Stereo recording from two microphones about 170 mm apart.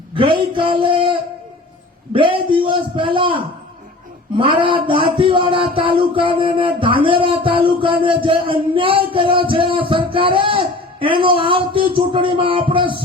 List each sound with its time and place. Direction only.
0.2 s speech: 30° right (ahead or behind)
2.1 s speech: 30° right (ahead or behind)
6.1 s music: 30° right (ahead or behind)